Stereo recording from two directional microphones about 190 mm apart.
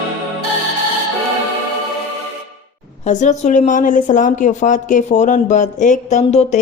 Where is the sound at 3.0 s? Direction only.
40° left (ahead or behind).